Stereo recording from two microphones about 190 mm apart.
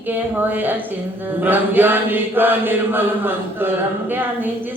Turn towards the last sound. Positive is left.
turn(degrees=-10)  # may be behind; listen again after turning